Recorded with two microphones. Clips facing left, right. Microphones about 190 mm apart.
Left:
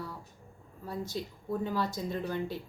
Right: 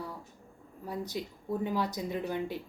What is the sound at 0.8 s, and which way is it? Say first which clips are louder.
Speech: even; 15° right (ahead or behind).